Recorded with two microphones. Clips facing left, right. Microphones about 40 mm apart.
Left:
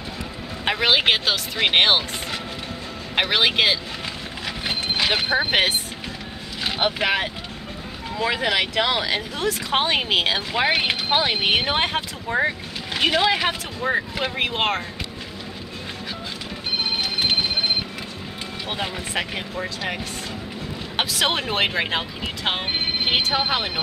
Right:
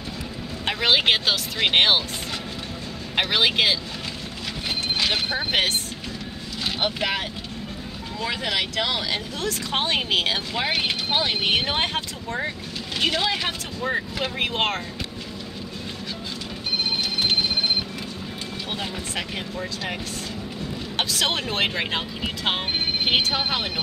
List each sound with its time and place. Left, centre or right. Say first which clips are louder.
0.7 s speech: left 1 dB; centre
3.2 s speech: left 2 dB; centre
4.6 s music: left 2 dB; centre
6.6 s speech: left 3 dB; centre
17.2 s a sound: left 1 dB; centre
18.7 s speech: left 4 dB; centre